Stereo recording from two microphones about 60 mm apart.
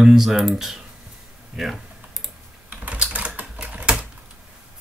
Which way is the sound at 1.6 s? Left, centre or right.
Centre.